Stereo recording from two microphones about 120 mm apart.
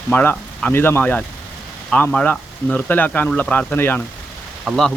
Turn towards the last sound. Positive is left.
turn(degrees=0)  # may be behind; listen again after turning